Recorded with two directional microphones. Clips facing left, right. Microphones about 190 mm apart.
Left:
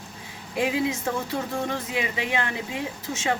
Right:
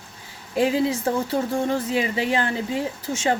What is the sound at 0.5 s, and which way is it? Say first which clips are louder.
A woman's voice: right 4 dB; 35° right (ahead or behind).